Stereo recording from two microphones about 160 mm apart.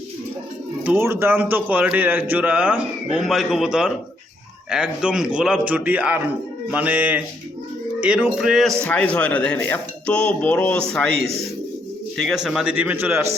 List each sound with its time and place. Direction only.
0.9 s a man's voice: 15° right (ahead or behind)